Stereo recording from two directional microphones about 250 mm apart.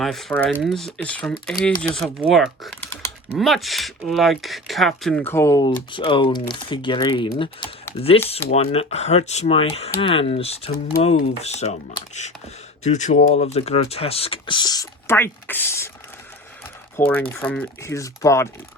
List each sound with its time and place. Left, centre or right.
0.0 s speech: centre
17.1 s speech: centre